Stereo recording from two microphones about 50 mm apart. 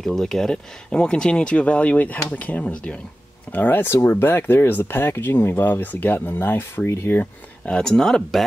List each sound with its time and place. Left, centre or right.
0.0 s speech: centre; by 3.0 s left
3.5 s speech: left
3.8 s speech: left
5.7 s speech: left
7.7 s speech: centre